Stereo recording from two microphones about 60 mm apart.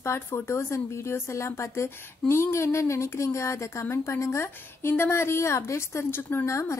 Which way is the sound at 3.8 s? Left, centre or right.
Left.